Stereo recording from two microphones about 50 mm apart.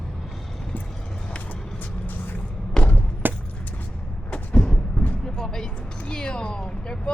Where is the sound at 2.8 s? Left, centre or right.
Left.